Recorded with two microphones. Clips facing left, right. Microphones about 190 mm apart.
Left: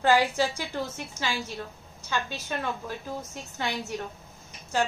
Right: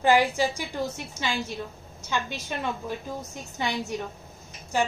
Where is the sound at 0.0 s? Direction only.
15° right (ahead or behind).